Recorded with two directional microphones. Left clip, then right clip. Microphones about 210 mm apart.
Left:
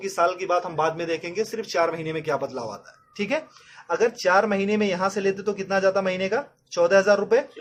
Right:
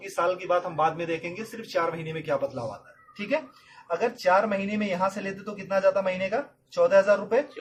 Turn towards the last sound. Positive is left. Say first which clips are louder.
# left 2 dB
turn(degrees=50)  # may be behind; listen again after turning